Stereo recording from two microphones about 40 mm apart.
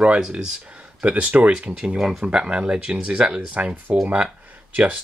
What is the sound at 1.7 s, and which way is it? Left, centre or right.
Speech, centre.